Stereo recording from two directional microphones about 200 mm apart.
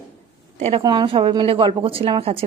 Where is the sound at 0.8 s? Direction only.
20° right (ahead or behind).